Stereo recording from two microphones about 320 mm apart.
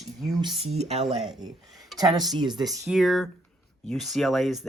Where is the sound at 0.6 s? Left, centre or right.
Centre.